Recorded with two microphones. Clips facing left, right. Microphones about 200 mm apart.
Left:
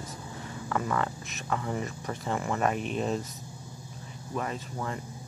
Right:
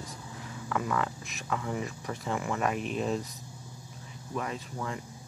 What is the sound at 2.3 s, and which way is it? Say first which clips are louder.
Speech: left 2 dB; 35° left (ahead or behind).